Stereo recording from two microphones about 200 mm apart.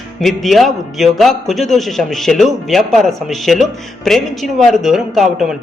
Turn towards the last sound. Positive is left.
turn(degrees=0)  # may be behind; listen again after turning